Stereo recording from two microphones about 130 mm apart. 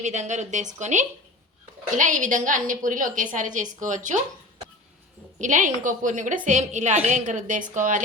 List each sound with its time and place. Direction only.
0.0 s a woman's voice: 65° right (ahead or behind); by 3.2 s 90° right
3.3 s a woman's voice: 75° right (ahead or behind)
5.4 s a woman's voice: 75° right (ahead or behind)